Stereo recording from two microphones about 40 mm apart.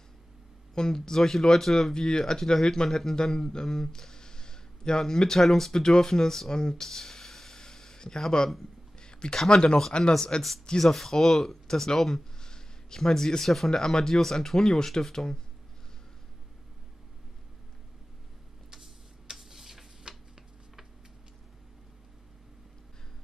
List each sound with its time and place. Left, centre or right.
0.7 s speech: centre
9.0 s a sound: left
9.4 s speech: centre
10.8 s speech: centre
18.7 s tick-tock: centre